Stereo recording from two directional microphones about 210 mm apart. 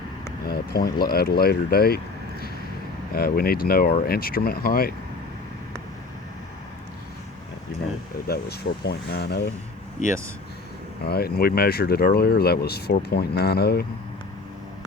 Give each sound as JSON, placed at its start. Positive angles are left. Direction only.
{"t": 0.4, "sound": "speech", "side_deg": 45}
{"t": 3.2, "sound": "speech", "side_deg": 45}
{"t": 8.3, "sound": "speech", "side_deg": 50}
{"t": 11.0, "sound": "speech", "side_deg": 50}